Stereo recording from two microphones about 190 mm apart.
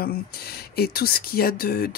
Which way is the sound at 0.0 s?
55° left (ahead or behind).